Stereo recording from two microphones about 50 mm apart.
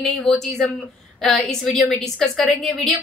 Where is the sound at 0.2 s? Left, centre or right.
Centre.